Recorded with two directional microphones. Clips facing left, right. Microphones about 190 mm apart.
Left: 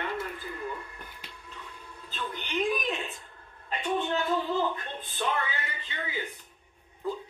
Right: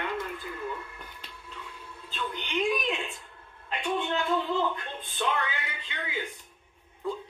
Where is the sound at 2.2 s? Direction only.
Centre (ahead or behind).